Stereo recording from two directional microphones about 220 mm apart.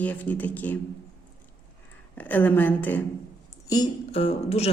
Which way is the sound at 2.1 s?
5° left (ahead or behind).